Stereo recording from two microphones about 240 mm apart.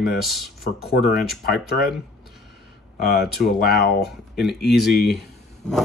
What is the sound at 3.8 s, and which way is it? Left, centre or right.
Speech, left.